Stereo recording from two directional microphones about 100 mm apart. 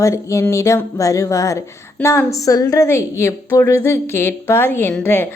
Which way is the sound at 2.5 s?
35° left (ahead or behind).